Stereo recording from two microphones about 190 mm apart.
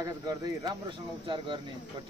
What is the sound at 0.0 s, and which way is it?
Speech, 20° right (ahead or behind).